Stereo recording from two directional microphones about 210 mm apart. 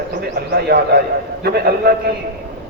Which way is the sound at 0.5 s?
50° right (ahead or behind).